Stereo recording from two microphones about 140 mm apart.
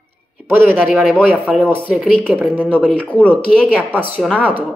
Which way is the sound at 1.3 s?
10° right (ahead or behind).